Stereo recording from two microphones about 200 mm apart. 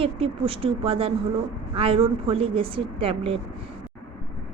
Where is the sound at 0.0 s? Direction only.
25° right (ahead or behind).